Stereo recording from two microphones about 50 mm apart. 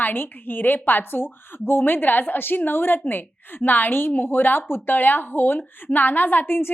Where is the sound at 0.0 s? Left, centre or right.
Left.